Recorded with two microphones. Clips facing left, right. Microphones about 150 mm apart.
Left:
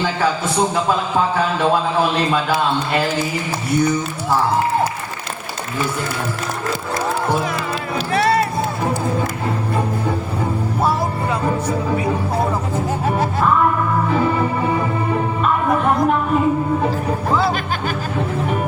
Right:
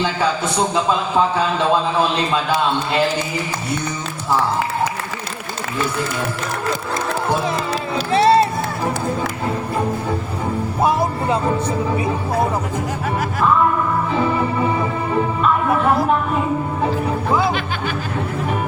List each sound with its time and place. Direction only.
7.9 s music: 25° right (ahead or behind)